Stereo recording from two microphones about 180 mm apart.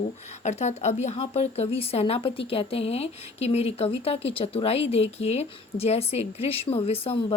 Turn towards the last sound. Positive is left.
turn(degrees=30)  # may be behind; listen again after turning